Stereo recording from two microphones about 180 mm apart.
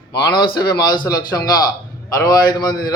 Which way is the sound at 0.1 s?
25° left (ahead or behind).